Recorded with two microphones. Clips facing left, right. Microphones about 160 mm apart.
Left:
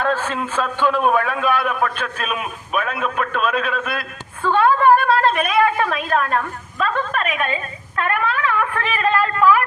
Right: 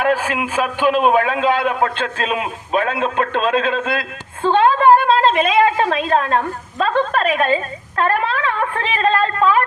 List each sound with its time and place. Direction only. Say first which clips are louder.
0.0 s a man's voice: right 3 dB; 10° right (ahead or behind); by 9.6 s 30° right (ahead or behind)